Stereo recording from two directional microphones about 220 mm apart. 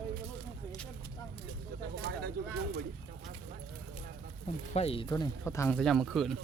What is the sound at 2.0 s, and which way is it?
Speech, 50° right (ahead or behind).